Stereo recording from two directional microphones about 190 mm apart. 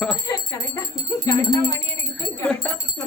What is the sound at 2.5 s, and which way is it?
Speech, 5° left (ahead or behind).